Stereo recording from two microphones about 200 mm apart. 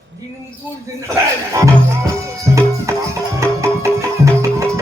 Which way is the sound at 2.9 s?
15° right (ahead or behind).